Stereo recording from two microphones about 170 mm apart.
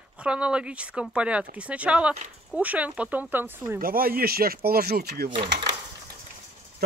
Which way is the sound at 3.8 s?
60° right (ahead or behind).